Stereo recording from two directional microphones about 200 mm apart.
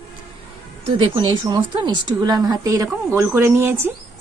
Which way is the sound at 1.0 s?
20° right (ahead or behind).